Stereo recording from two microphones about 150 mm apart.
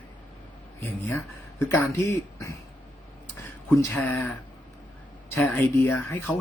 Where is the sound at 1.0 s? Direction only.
20° left (ahead or behind).